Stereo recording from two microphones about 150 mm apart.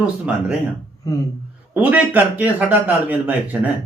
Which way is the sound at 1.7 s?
10° right (ahead or behind).